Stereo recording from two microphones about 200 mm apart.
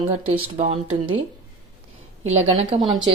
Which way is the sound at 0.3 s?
30° right (ahead or behind).